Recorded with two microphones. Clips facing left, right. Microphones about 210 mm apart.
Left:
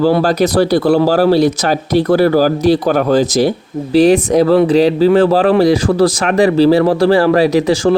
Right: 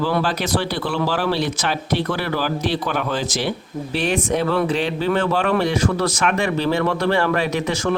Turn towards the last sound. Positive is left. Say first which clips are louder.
# left 10 dB
turn(degrees=35)  # may be behind; listen again after turning